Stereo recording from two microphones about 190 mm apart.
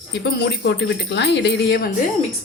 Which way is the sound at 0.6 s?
65° left (ahead or behind).